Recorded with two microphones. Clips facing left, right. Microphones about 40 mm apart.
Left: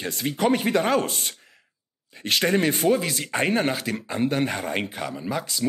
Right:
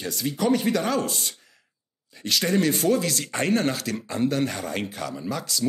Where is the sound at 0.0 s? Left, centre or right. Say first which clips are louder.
Left 2 dB; left.